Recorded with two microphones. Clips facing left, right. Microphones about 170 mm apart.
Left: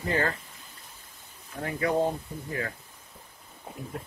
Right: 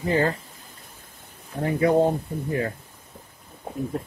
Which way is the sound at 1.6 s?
30° right (ahead or behind).